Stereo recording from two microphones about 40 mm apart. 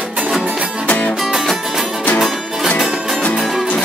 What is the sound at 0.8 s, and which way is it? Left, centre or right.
Music, left.